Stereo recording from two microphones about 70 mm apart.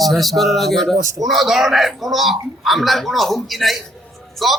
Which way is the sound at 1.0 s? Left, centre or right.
Right.